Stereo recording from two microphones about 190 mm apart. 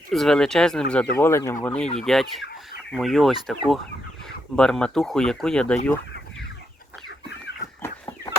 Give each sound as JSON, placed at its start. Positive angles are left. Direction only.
{"t": 0.1, "sound": "speech", "side_deg": 0}
{"t": 1.1, "sound": "speech", "side_deg": 15}
{"t": 7.8, "sound": "fowl", "side_deg": 15}